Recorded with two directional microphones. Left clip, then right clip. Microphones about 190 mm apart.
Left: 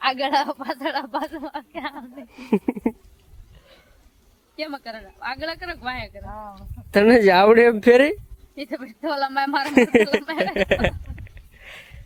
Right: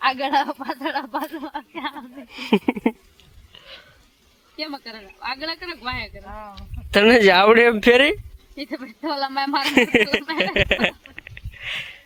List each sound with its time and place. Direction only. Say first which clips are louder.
0.0 s speech: right 1 dB; 25° left (ahead or behind)
2.3 s speech: right 3 dB; 5° right (ahead or behind)
4.5 s speech: left 1 dB; 20° left (ahead or behind)
6.2 s speech: left 1 dB; 30° right (ahead or behind)
6.6 s speech: right 1 dB; centre (ahead or behind)
8.5 s speech: even; 20° left (ahead or behind)
9.6 s speech: even; centre (ahead or behind)
10.4 s a sound: right 2 dB; centre (ahead or behind)